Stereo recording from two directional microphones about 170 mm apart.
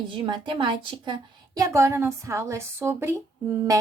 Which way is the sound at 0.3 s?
30° right (ahead or behind).